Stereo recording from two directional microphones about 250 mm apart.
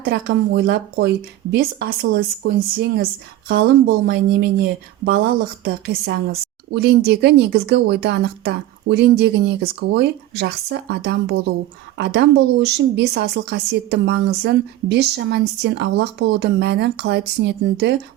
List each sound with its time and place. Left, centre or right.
0.0 s a woman's voice: right